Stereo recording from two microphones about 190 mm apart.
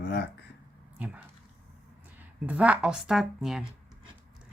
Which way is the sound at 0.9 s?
10° right (ahead or behind).